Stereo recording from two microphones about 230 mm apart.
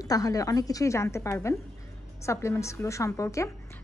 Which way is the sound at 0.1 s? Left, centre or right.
Centre.